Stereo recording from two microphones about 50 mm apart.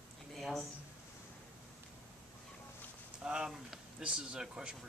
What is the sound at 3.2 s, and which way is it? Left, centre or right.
Speech, centre.